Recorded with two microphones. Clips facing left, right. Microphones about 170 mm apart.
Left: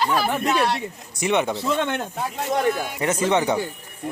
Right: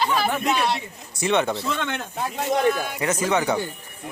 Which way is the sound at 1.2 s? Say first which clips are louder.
Even; 15° left (ahead or behind).